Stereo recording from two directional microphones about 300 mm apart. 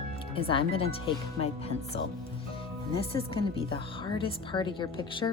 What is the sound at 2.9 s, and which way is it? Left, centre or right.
A woman's voice, centre.